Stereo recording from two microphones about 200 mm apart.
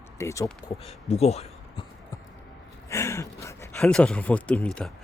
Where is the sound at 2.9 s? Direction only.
15° left (ahead or behind).